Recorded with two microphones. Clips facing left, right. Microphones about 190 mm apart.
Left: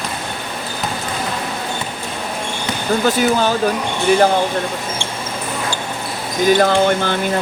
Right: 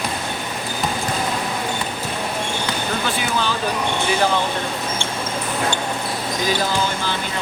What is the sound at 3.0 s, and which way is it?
Speech, 45° left (ahead or behind).